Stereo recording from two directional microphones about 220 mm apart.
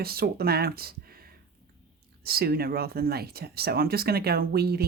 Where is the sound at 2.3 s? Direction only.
45° right (ahead or behind).